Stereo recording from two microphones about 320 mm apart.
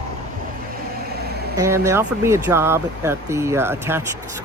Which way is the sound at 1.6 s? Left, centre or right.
Centre.